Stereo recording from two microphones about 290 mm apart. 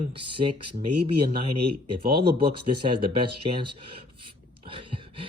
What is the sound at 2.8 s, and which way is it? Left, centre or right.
Speech, centre.